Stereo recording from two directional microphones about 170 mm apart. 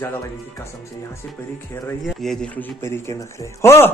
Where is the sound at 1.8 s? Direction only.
10° left (ahead or behind).